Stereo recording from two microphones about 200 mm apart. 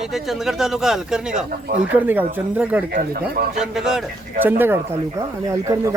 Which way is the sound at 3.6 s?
Centre (ahead or behind).